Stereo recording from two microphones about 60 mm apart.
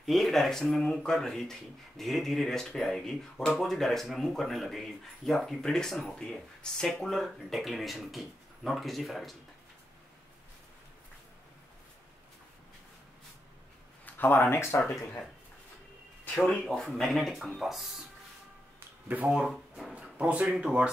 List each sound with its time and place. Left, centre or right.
0.0 s speech: centre
14.0 s speech: left
16.6 s speech: centre
19.2 s speech: centre
19.5 s drawer open or close: centre
20.2 s speech: right